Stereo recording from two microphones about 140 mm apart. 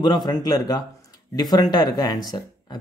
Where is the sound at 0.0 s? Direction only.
30° left (ahead or behind).